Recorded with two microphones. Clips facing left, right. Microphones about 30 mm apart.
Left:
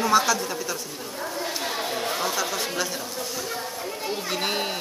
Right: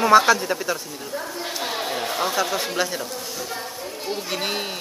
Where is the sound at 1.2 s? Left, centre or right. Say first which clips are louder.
Even; centre.